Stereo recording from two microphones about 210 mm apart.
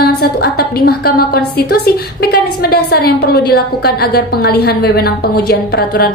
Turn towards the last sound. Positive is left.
turn(degrees=45)  # may be behind; listen again after turning